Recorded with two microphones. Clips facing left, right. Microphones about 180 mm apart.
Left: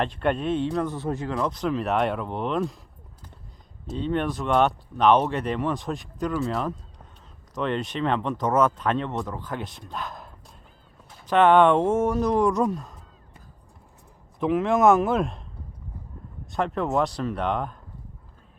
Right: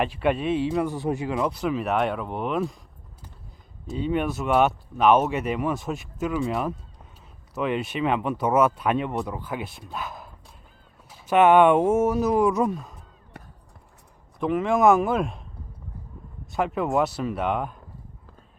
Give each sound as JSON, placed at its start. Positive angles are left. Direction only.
{"t": 0.0, "sound": "speech", "side_deg": -5}
{"t": 3.8, "sound": "speech", "side_deg": -10}
{"t": 6.5, "sound": "honk", "side_deg": -10}
{"t": 7.5, "sound": "speech", "side_deg": -5}
{"t": 14.3, "sound": "speech", "side_deg": 0}
{"t": 16.5, "sound": "speech", "side_deg": -5}